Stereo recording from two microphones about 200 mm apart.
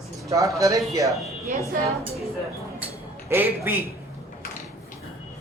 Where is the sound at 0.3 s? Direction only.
15° right (ahead or behind).